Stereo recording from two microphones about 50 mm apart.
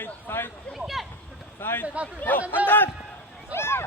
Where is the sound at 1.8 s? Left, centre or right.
Right.